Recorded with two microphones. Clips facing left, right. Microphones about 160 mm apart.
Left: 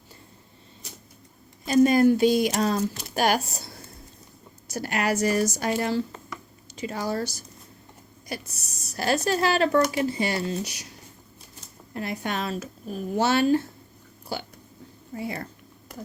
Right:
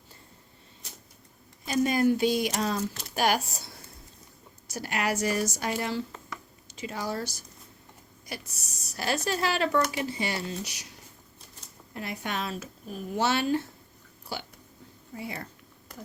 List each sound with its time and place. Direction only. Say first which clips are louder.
1.6 s speech: left 6 dB; 45° left (ahead or behind)
4.7 s speech: left 4 dB; 45° left (ahead or behind)
9.0 s speech: left 5 dB; 40° left (ahead or behind)
11.9 s speech: left 4 dB; 40° left (ahead or behind)